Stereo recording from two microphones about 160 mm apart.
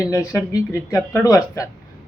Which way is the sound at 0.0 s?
20° left (ahead or behind).